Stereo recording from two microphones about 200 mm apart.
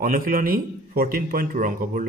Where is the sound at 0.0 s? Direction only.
45° right (ahead or behind).